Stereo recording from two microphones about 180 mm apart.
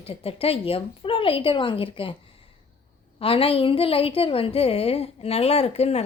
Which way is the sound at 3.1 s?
30° left (ahead or behind).